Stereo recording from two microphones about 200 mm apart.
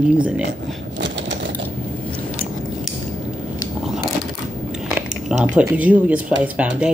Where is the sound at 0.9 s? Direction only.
60° right (ahead or behind).